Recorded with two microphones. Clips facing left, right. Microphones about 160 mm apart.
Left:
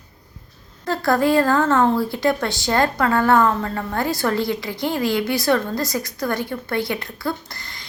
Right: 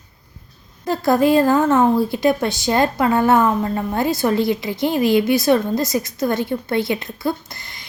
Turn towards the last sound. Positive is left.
turn(degrees=-20)  # may be behind; listen again after turning